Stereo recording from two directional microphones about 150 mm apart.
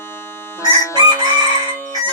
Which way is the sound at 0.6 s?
20° left (ahead or behind).